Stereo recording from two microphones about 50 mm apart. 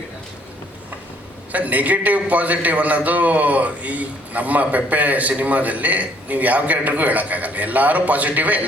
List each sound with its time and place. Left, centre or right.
1.5 s a man's voice: right